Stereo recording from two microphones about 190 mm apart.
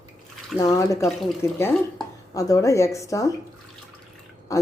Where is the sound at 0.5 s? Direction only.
20° left (ahead or behind).